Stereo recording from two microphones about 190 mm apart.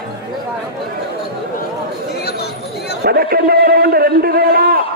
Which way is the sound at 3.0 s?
55° right (ahead or behind).